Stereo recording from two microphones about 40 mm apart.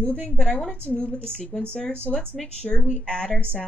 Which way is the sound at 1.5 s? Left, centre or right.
Left.